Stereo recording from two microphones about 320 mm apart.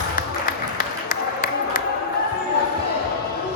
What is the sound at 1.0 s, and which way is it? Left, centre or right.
Run, left.